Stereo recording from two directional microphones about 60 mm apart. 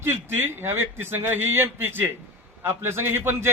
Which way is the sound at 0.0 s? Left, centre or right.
Right.